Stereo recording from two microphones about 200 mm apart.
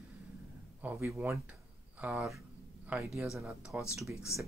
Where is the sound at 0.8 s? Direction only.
10° right (ahead or behind).